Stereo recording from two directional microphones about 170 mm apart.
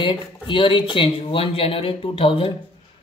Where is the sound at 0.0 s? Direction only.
30° left (ahead or behind).